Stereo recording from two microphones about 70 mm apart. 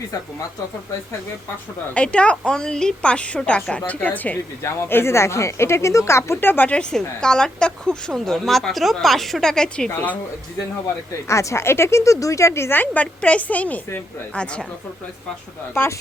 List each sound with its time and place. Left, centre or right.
1.9 s speech: centre
4.6 s speech: left
6.7 s speech: centre
11.3 s speech: left; by 14.7 s centre
15.7 s speech: left